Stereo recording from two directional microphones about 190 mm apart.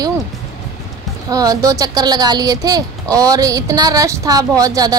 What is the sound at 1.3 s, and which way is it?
A woman's voice, 20° right (ahead or behind).